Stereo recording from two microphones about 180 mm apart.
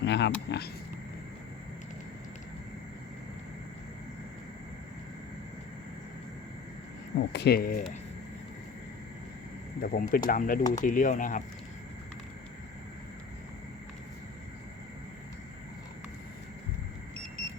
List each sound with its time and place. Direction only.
0.0 s speech: 75° left (ahead or behind)
7.2 s speech: 65° left (ahead or behind)
9.8 s speech: 50° left (ahead or behind)